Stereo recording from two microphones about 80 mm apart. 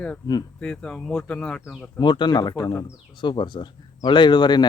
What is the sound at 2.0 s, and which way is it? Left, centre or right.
Speech, left.